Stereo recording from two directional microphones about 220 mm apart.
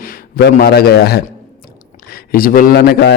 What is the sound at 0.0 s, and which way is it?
A man's voice, 45° left (ahead or behind).